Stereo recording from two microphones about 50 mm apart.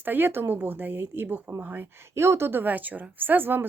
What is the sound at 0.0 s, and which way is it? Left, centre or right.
Speech, right.